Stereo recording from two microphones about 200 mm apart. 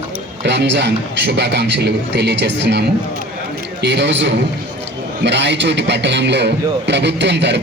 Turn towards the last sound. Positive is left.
turn(degrees=-60)  # may be behind; listen again after turning